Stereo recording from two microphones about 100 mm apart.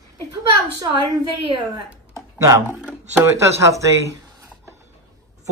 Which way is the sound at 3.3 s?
30° right (ahead or behind).